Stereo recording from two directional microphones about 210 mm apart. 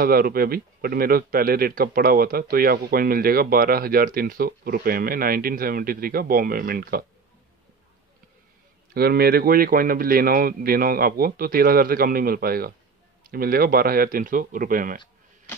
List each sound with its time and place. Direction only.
0.0 s a man's voice: 45° right (ahead or behind)
8.9 s a man's voice: 45° right (ahead or behind)